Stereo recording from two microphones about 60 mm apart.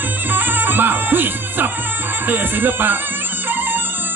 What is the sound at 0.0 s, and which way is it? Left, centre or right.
Music, right.